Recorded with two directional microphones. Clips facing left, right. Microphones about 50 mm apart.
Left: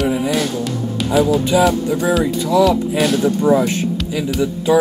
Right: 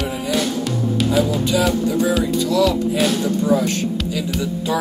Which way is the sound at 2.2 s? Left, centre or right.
Left.